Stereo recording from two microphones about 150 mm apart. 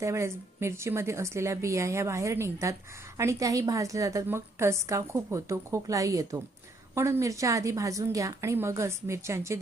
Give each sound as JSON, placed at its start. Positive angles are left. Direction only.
{"t": 0.0, "sound": "a woman's voice", "side_deg": -20}